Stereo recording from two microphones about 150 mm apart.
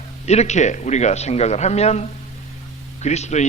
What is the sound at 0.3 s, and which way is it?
Speech, 50° left (ahead or behind).